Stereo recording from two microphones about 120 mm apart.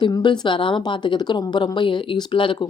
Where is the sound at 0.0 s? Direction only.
40° left (ahead or behind).